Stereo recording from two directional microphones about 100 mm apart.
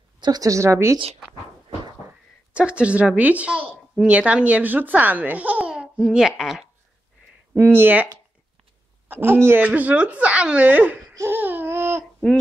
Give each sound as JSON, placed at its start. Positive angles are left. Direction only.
{"t": 0.2, "sound": "a woman's voice", "side_deg": -40}
{"t": 2.5, "sound": "speech", "side_deg": -10}
{"t": 7.5, "sound": "a man's voice", "side_deg": -20}
{"t": 9.1, "sound": "a man's voice", "side_deg": -20}
{"t": 11.1, "sound": "babbling", "side_deg": -20}